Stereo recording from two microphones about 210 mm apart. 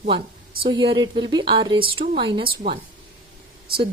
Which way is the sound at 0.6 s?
25° right (ahead or behind).